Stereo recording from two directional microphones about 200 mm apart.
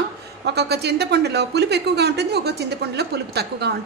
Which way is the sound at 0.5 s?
55° right (ahead or behind).